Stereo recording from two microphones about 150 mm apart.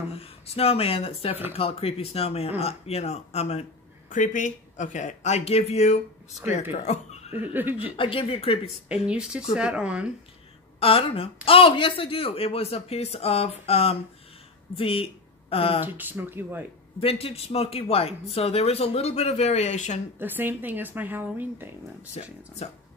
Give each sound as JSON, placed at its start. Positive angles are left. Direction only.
{"t": 0.1, "sound": "speech", "side_deg": 40}
{"t": 4.1, "sound": "speech", "side_deg": 55}
{"t": 7.9, "sound": "speech", "side_deg": 35}
{"t": 8.6, "sound": "speech", "side_deg": -5}
{"t": 10.8, "sound": "speech", "side_deg": 40}
{"t": 15.8, "sound": "speech", "side_deg": -10}
{"t": 17.0, "sound": "speech", "side_deg": 40}
{"t": 20.2, "sound": "speech", "side_deg": -15}
{"t": 22.2, "sound": "speech", "side_deg": 45}